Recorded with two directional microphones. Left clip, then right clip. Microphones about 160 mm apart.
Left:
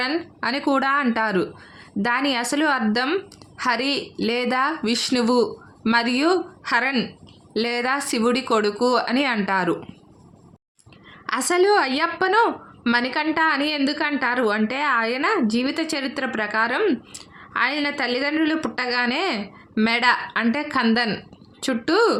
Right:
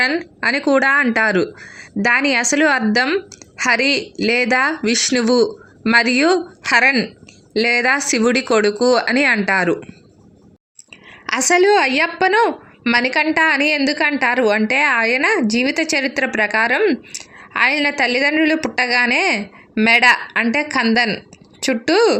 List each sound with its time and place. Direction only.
0.0 s a woman's voice: 20° right (ahead or behind)
11.3 s a woman's voice: 20° right (ahead or behind)